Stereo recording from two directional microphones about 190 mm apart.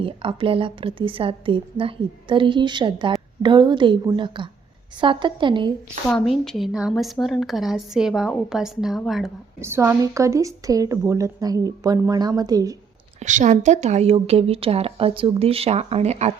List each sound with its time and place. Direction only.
0.0 s a woman's voice: 25° right (ahead or behind)
6.1 s speech: centre (ahead or behind)
9.6 s a woman's voice: 10° right (ahead or behind)
13.1 s a woman's voice: 40° right (ahead or behind)